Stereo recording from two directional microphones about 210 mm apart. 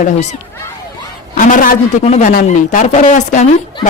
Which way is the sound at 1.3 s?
40° left (ahead or behind).